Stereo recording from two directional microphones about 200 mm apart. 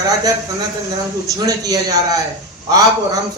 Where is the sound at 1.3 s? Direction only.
20° right (ahead or behind).